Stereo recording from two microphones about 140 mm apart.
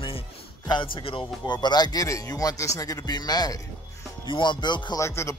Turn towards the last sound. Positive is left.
turn(degrees=20)  # may be behind; listen again after turning